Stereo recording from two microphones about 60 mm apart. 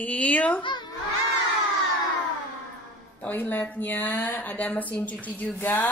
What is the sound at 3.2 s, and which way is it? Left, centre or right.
Speech, left.